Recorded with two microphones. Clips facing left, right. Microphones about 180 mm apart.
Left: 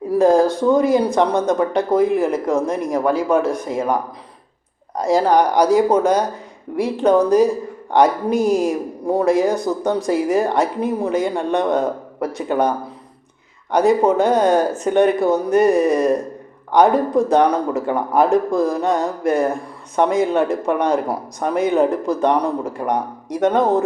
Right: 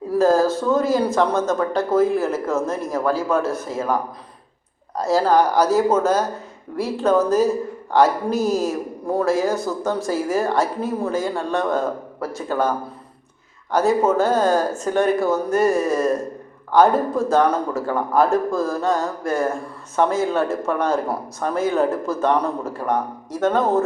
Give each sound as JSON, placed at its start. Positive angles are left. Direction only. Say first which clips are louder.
{"t": 0.2, "sound": "speech", "louder": "left 3 dB", "side_deg": 15}
{"t": 4.9, "sound": "speech", "louder": "left 2 dB", "side_deg": 15}